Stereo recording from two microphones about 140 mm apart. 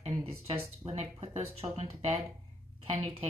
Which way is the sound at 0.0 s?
45° right (ahead or behind).